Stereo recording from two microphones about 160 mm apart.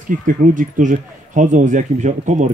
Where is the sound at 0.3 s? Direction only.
55° right (ahead or behind).